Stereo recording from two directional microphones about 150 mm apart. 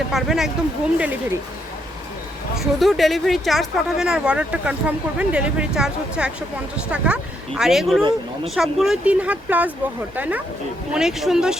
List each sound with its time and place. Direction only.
0.1 s speech: centre (ahead or behind)
2.6 s speech: centre (ahead or behind)